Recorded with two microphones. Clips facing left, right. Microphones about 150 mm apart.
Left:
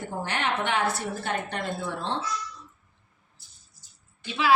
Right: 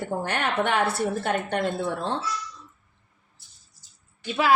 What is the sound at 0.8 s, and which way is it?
Speech, 30° right (ahead or behind).